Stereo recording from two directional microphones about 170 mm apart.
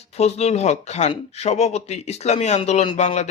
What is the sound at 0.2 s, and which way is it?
Speech, 40° left (ahead or behind).